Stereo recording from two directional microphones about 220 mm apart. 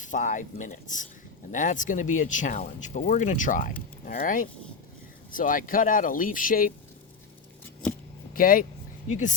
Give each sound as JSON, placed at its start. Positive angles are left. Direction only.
{"t": 0.0, "sound": "speech", "side_deg": 35}
{"t": 8.3, "sound": "speech", "side_deg": 40}